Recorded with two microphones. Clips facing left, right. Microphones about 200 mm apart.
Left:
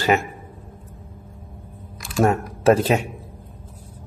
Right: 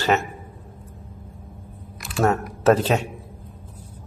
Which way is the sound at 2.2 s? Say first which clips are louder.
Left 1 dB; 10° left (ahead or behind).